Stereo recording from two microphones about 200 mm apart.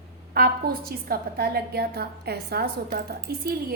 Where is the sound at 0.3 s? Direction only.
50° right (ahead or behind).